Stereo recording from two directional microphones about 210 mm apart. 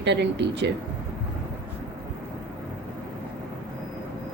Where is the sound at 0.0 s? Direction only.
55° right (ahead or behind).